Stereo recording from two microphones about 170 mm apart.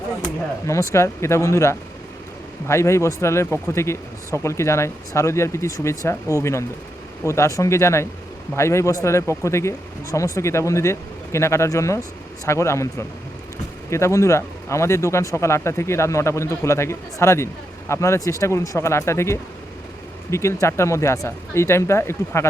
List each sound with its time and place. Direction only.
0.6 s speech: 15° left (ahead or behind)